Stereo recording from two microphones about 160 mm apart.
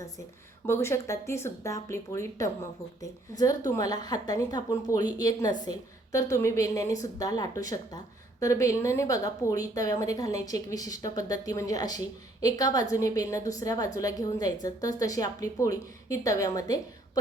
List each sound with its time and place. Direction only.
0.7 s a woman's voice: 15° left (ahead or behind)